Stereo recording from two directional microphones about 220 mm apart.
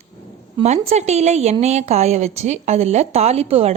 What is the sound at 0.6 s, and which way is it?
A woman's voice, 30° right (ahead or behind).